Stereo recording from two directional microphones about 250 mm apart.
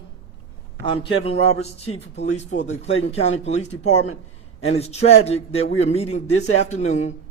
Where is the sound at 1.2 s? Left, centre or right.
Left.